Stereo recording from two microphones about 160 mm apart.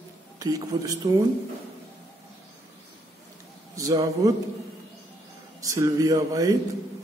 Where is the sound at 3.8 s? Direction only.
20° right (ahead or behind).